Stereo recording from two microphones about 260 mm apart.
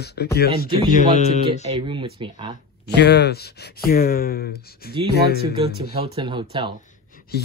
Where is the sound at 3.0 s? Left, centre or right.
Left.